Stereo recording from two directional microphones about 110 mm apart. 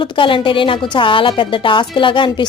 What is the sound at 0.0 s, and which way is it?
A woman's voice, 50° left (ahead or behind).